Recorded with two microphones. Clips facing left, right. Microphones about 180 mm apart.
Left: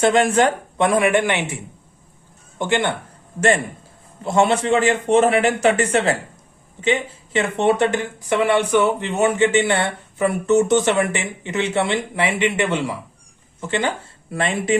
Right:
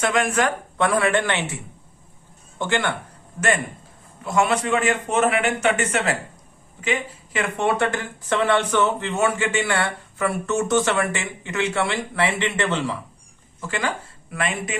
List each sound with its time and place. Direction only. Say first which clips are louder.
0.0 s a woman's voice: left 5 dB; 30° left (ahead or behind)
2.6 s speech: left 3 dB; 20° left (ahead or behind)
4.2 s speech: left 4 dB; 25° left (ahead or behind); by 13.0 s 10° left (ahead or behind)
13.6 s speech: left 4 dB; 25° left (ahead or behind)